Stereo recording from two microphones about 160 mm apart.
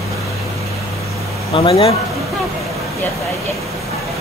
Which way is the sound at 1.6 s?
35° left (ahead or behind).